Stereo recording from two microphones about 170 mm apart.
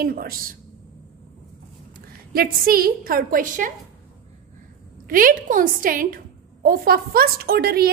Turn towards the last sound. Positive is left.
turn(degrees=-65)  # may be behind; listen again after turning